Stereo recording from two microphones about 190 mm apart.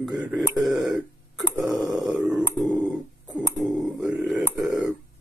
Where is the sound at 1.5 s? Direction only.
15° right (ahead or behind); by 4.8 s centre (ahead or behind).